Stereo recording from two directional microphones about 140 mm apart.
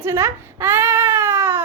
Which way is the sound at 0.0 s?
20° right (ahead or behind).